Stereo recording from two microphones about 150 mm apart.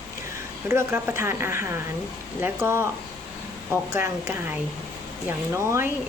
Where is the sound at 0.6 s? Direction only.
15° right (ahead or behind).